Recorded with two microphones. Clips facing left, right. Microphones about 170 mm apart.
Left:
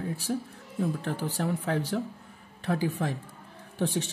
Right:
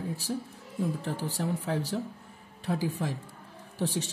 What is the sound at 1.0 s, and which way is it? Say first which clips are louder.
Speech: left 2 dB; 65° left (ahead or behind).